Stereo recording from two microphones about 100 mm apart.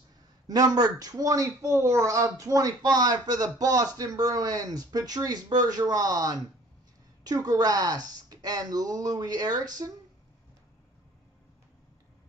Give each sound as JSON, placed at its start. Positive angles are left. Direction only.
{"t": 0.5, "sound": "speech", "side_deg": -40}